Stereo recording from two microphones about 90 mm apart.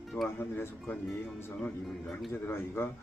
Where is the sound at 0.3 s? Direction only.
25° left (ahead or behind).